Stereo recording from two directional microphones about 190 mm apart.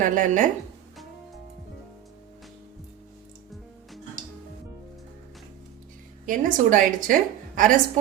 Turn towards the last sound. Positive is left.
turn(degrees=-45)  # may be behind; listen again after turning